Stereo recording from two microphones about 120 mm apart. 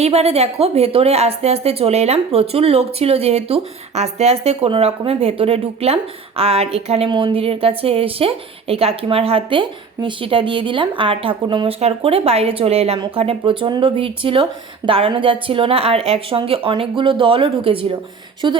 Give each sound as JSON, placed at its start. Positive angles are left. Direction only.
{"t": 0.0, "sound": "a woman's voice", "side_deg": -60}
{"t": 7.1, "sound": "a woman's voice", "side_deg": -45}
{"t": 11.8, "sound": "a woman's voice", "side_deg": -55}